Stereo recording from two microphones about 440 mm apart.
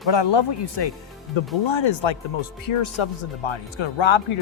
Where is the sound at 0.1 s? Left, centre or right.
Left.